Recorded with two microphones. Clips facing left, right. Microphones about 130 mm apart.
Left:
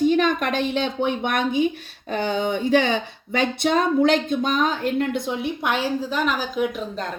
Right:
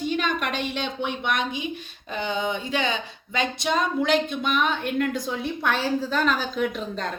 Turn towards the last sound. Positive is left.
turn(degrees=5)  # may be behind; listen again after turning